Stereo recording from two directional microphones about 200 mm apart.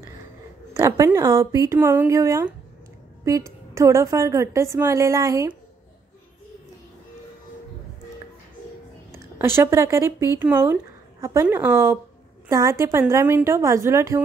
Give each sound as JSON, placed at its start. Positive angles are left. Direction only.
{"t": 0.7, "sound": "speech", "side_deg": -15}
{"t": 9.1, "sound": "speech", "side_deg": -10}